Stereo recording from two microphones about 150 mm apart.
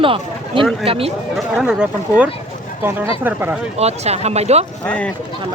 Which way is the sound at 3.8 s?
45° right (ahead or behind).